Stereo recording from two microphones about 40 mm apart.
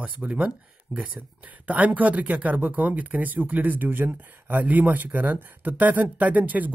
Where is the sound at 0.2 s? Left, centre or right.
Centre.